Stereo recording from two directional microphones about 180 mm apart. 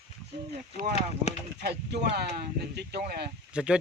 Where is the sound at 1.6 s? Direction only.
70° right (ahead or behind).